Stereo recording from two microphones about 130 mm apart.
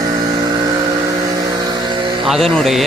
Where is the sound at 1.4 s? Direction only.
30° right (ahead or behind).